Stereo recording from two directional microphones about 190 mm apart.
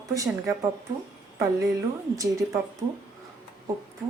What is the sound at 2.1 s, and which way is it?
Speech, 15° right (ahead or behind).